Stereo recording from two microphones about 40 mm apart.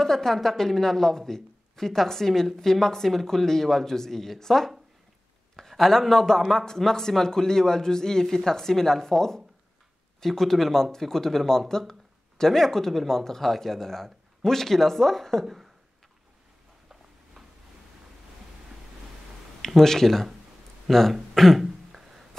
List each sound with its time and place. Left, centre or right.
0.0 s speech: centre
15.4 s speech: centre
19.6 s speech: centre
20.9 s a sound: centre